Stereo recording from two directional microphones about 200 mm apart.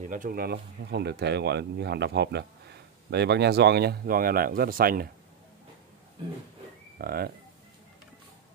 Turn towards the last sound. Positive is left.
turn(degrees=-50)  # may be behind; listen again after turning